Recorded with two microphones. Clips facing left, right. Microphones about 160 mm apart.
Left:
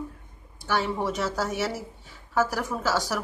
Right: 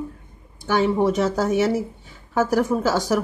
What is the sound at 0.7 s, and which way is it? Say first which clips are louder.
Speech: right 8 dB; 20° right (ahead or behind).